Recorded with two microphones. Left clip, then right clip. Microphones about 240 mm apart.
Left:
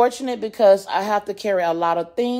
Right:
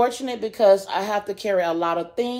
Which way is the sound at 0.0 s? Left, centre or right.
Left.